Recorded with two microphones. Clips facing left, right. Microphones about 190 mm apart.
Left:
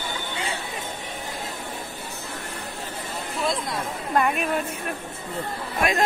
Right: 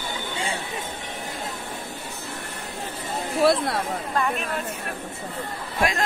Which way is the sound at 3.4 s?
65° right (ahead or behind).